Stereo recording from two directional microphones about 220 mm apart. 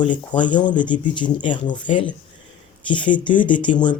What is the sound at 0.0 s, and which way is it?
Speech, 20° left (ahead or behind).